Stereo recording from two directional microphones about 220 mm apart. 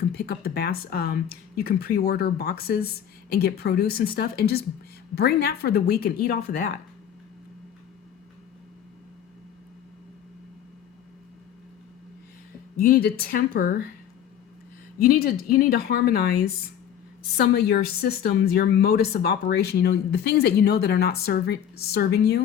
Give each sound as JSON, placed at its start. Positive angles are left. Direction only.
{"t": 0.0, "sound": "a woman's voice", "side_deg": 45}
{"t": 12.7, "sound": "a woman's voice", "side_deg": 40}
{"t": 14.9, "sound": "a woman's voice", "side_deg": 40}